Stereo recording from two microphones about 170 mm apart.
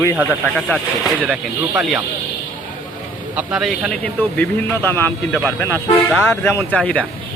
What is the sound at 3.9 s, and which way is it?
Speech, 10° left (ahead or behind).